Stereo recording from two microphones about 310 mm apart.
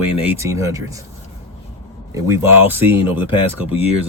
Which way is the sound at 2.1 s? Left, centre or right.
Centre.